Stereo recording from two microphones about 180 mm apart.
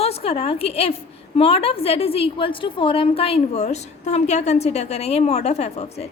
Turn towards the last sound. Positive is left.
turn(degrees=35)  # may be behind; listen again after turning